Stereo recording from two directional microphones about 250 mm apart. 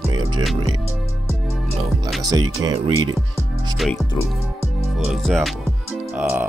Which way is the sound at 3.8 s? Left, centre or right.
Centre.